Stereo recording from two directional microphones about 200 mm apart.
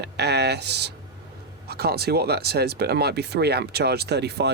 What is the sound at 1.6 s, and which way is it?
Speech, 50° right (ahead or behind).